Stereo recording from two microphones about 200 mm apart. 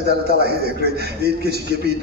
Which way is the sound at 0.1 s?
55° right (ahead or behind).